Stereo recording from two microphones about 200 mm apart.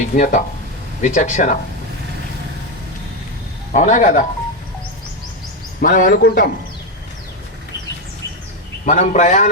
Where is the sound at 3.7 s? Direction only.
40° left (ahead or behind).